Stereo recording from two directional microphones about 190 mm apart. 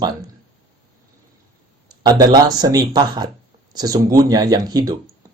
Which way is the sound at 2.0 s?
20° right (ahead or behind).